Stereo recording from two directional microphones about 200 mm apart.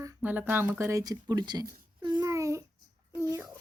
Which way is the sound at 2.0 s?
20° right (ahead or behind).